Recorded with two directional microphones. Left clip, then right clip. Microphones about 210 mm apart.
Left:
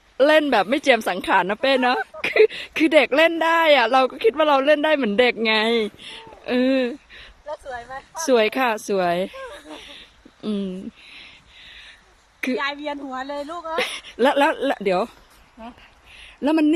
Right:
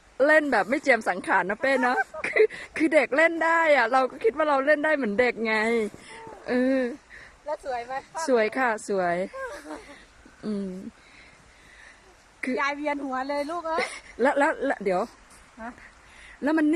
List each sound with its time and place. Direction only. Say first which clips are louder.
0.2 s speech: left 4 dB; centre (ahead or behind)
7.4 s a woman's voice: right 1 dB; 15° right (ahead or behind)
8.3 s speech: left 5 dB; centre (ahead or behind)
12.4 s a woman's voice: left 2 dB; centre (ahead or behind); by 13.7 s 15° right (ahead or behind)
13.7 s speech: left 9 dB; centre (ahead or behind)
16.4 s speech: left 5 dB; 5° left (ahead or behind)